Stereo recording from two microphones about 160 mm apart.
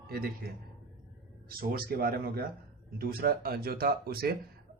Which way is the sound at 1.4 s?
65° right (ahead or behind).